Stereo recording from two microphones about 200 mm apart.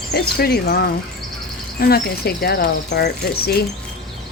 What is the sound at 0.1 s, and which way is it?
Speech, 55° left (ahead or behind).